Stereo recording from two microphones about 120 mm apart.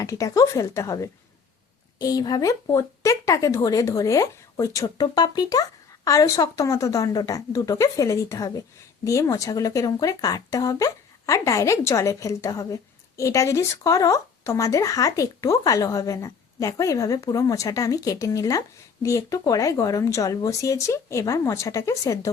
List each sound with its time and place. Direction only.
0.0 s speech: 30° left (ahead or behind)